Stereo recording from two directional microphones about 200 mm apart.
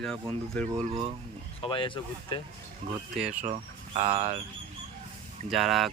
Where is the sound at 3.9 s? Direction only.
30° right (ahead or behind).